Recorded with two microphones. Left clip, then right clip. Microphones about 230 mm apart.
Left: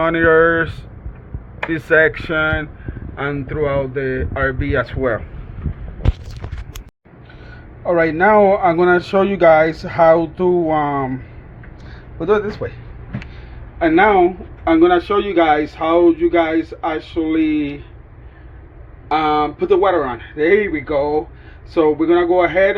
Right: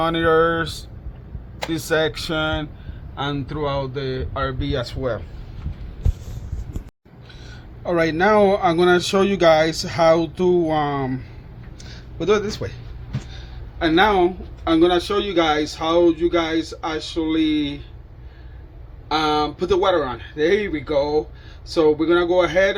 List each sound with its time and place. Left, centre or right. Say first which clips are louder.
0.0 s a man's voice: left 5 dB; right
7.9 s a man's voice: left 4 dB; right
12.2 s a man's voice: left 3 dB; right
13.7 s a man's voice: left 4 dB; right
19.1 s a man's voice: left 4 dB; right